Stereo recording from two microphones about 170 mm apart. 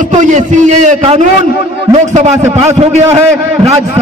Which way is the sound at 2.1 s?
40° right (ahead or behind).